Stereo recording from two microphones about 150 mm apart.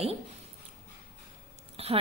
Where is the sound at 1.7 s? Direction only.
40° right (ahead or behind).